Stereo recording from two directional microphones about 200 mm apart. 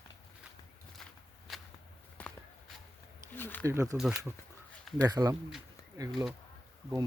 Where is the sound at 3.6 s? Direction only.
15° right (ahead or behind).